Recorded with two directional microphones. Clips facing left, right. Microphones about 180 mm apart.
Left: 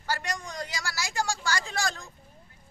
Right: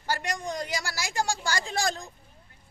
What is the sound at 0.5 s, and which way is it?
A woman's voice, 20° right (ahead or behind).